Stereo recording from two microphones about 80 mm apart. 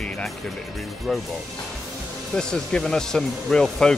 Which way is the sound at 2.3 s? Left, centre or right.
Centre.